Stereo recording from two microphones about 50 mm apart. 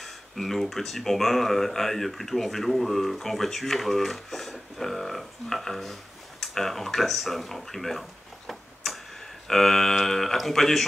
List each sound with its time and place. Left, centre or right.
0.0 s speech: centre